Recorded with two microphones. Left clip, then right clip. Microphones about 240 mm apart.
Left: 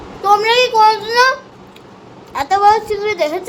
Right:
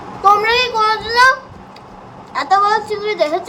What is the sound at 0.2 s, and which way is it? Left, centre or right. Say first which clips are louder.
Child singing: even; left.